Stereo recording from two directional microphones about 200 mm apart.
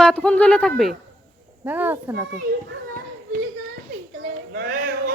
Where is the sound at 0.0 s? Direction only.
5° left (ahead or behind).